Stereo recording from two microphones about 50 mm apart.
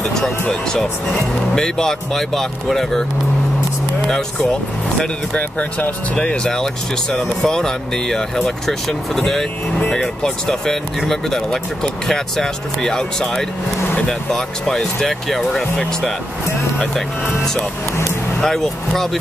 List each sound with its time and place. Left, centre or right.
0.0 s music: centre
0.5 s speech: centre
4.5 s speech: centre
5.3 s speech: left
6.1 s speech: centre
18.4 s speech: centre